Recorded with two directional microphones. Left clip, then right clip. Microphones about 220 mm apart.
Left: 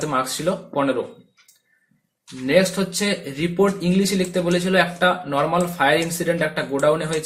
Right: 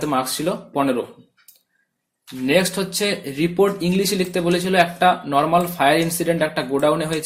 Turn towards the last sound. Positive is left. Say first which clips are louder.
# even
turn(degrees=-35)  # may be behind; listen again after turning